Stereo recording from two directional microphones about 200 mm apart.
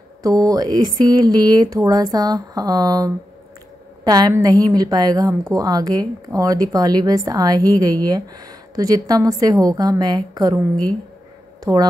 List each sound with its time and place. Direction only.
0.2 s a woman's voice: 20° right (ahead or behind)
11.6 s a woman's voice: 20° right (ahead or behind)